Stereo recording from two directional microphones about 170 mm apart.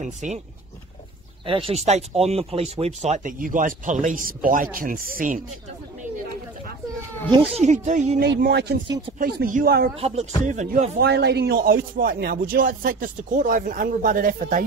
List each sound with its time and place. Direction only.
0.0 s speech: 45° right (ahead or behind)
1.4 s speech: 30° right (ahead or behind); by 5.4 s 55° right (ahead or behind)
7.2 s speech: 30° right (ahead or behind)
7.6 s speech: 45° right (ahead or behind)
8.2 s speech: 75° right (ahead or behind)
9.2 s speech: 55° right (ahead or behind)
9.9 s rapping: 35° right (ahead or behind)
10.4 s speech: 45° right (ahead or behind)
11.0 s speech: 75° right (ahead or behind); by 14.6 s 55° right (ahead or behind)